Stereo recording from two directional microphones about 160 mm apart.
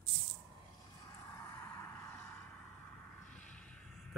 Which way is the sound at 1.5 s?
15° left (ahead or behind).